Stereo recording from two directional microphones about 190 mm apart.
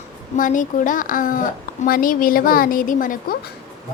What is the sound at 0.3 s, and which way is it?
A woman's voice, 40° left (ahead or behind).